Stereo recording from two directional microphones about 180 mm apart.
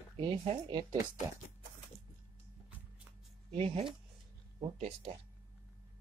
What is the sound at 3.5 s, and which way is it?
Speech, 30° right (ahead or behind).